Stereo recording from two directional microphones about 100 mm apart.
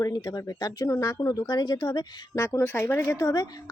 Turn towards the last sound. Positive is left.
turn(degrees=40)  # may be behind; listen again after turning